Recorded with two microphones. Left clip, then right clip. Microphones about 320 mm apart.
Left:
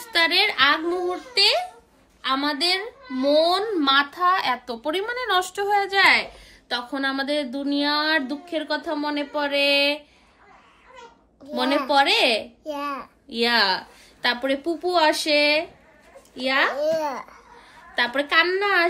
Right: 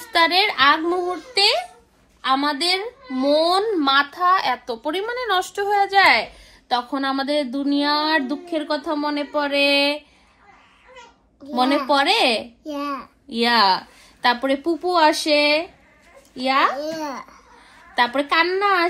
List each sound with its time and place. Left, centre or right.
0.1 s a woman's voice: centre
3.8 s speech: centre
7.0 s speech: centre
11.5 s speech: centre
12.6 s a child's voice: centre
13.3 s speech: centre
16.7 s a child's voice: centre
17.6 s speech: centre